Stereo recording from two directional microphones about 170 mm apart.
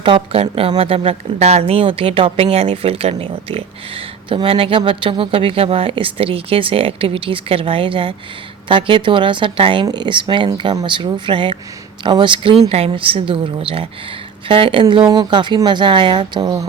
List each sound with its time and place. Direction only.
0.0 s speech: 35° right (ahead or behind)